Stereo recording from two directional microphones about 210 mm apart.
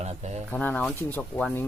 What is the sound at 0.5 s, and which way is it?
Speech, 5° left (ahead or behind).